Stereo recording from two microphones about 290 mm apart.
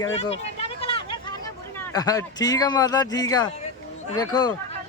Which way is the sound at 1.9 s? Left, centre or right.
Centre.